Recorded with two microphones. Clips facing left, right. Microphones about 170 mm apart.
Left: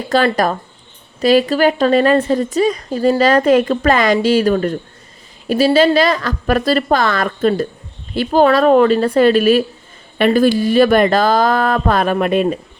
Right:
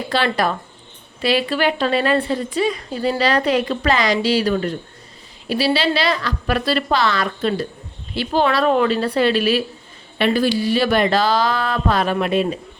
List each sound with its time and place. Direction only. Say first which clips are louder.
0.1 s a woman's voice: left 6 dB; 45° left (ahead or behind)